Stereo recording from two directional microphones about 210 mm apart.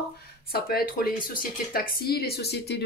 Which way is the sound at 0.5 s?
45° left (ahead or behind).